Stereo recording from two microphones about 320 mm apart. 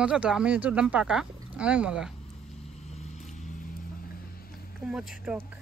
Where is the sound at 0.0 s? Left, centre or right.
Centre.